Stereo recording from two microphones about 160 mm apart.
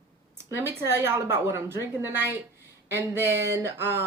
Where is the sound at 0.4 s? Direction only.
15° right (ahead or behind).